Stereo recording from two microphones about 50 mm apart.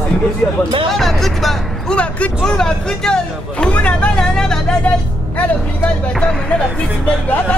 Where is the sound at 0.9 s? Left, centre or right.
Centre.